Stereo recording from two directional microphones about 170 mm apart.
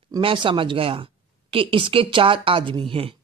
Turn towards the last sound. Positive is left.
turn(degrees=-30)  # may be behind; listen again after turning